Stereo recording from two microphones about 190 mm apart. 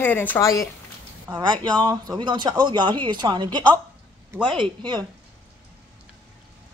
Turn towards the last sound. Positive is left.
turn(degrees=-25)  # may be behind; listen again after turning